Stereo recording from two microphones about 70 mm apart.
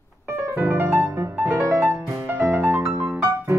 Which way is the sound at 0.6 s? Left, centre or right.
Right.